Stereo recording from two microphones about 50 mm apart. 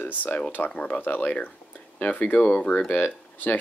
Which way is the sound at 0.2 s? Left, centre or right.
Left.